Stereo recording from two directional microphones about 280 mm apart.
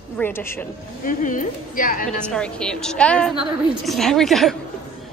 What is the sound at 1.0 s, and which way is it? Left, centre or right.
Speech, left.